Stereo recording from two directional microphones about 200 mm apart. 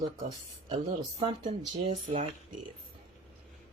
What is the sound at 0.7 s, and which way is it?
Speech, 35° right (ahead or behind).